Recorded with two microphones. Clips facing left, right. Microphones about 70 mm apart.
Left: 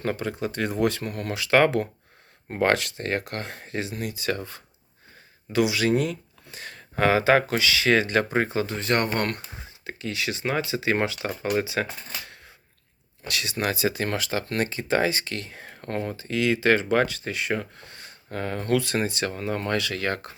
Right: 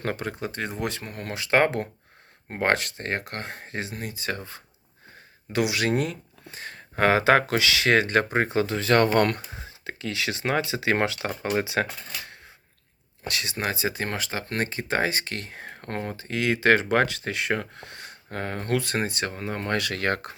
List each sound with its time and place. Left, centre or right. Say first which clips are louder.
0.0 s speech: left 2 dB; right
0.5 s speech: left 6 dB; right
5.5 s speech: left 2 dB; right
6.5 s a sound: right 1 dB; right
7.0 s speech: even; right
7.9 s speech: even; right
8.9 s speech: right 5 dB; right
11.8 s speech: right 1 dB; right
13.2 s speech: left 1 dB; right
18.3 s speech: left 2 dB; right
19.7 s speech: right 1 dB; right